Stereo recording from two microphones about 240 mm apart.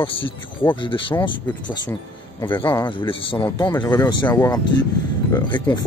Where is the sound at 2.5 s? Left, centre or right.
Centre.